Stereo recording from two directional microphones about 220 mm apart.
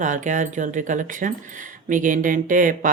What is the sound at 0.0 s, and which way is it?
Speech, 35° right (ahead or behind).